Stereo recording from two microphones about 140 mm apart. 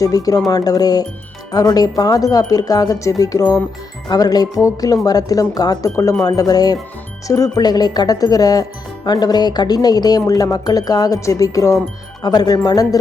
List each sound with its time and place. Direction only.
0.0 s speech: 25° left (ahead or behind)